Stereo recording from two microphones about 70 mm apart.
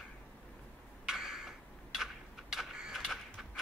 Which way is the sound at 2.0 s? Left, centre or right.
Centre.